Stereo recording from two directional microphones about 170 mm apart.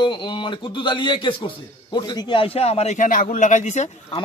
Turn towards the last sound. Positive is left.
turn(degrees=45)  # may be behind; listen again after turning